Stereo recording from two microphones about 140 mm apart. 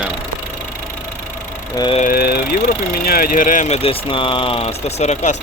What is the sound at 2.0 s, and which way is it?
Speech, 90° left.